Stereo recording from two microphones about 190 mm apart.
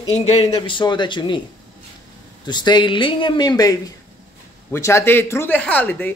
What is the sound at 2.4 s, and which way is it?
Speech, 25° left (ahead or behind).